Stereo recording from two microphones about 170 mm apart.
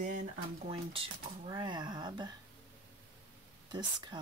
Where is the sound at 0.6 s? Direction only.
30° right (ahead or behind).